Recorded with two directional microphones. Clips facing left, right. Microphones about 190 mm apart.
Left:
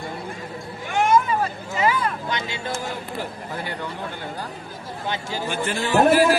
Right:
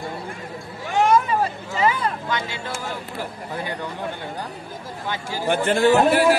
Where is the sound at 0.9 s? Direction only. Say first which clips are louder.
Right 2 dB; 35° right (ahead or behind).